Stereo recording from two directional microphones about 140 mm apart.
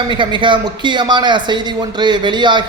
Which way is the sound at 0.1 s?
35° right (ahead or behind).